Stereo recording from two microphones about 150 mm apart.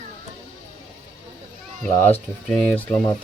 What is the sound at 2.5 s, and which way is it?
Speech, 10° left (ahead or behind).